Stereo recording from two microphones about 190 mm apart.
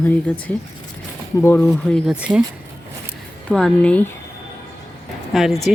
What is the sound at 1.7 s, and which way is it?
Speech, centre (ahead or behind).